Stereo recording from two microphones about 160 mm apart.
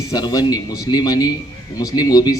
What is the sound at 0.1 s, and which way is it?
A man's voice, 25° left (ahead or behind).